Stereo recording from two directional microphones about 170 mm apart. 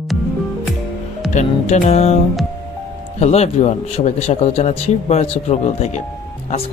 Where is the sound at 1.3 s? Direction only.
40° left (ahead or behind).